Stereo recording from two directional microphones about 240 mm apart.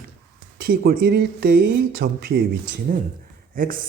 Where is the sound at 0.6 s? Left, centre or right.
Right.